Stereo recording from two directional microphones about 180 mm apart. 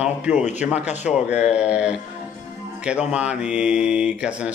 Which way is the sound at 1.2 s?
5° right (ahead or behind).